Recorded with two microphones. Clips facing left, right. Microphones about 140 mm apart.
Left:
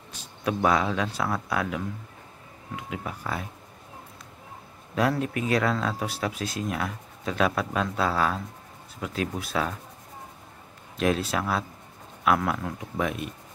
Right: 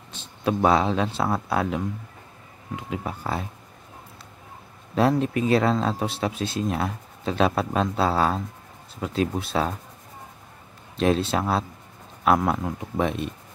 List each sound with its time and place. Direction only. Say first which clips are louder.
0.1 s speech: right 4 dB; 25° right (ahead or behind)
5.1 s speech: right 5 dB; 25° right (ahead or behind)
11.0 s speech: right 3 dB; 30° right (ahead or behind)